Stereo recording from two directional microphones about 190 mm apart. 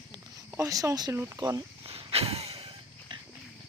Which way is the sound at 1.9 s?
30° right (ahead or behind).